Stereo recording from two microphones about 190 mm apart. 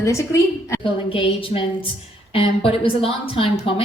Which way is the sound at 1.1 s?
30° left (ahead or behind).